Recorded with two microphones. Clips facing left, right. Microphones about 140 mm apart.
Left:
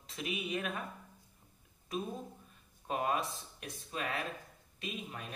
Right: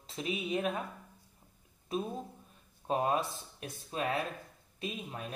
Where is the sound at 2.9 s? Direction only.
35° right (ahead or behind).